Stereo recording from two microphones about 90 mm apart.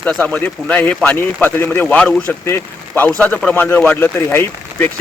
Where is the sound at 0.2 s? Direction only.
15° left (ahead or behind).